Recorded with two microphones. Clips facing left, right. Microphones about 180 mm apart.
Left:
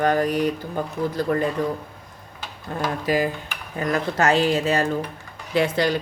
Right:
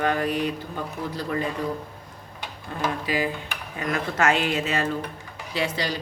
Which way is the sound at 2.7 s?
45° left (ahead or behind).